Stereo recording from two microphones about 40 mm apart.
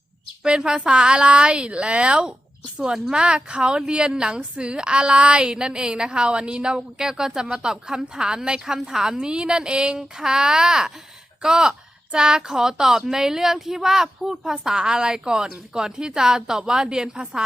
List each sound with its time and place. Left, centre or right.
0.4 s a woman's voice: centre